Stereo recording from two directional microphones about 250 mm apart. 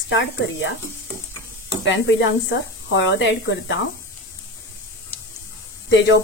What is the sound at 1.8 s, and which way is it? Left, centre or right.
Speech, left.